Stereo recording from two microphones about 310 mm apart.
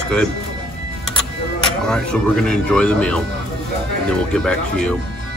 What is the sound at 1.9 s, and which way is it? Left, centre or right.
Speech, centre.